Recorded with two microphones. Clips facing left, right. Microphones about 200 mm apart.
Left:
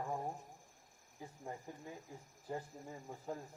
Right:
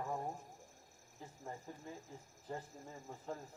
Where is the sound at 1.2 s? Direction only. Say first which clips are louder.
Left 2 dB; 10° left (ahead or behind).